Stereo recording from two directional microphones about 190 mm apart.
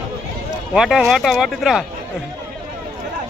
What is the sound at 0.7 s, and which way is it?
A man's voice, centre (ahead or behind).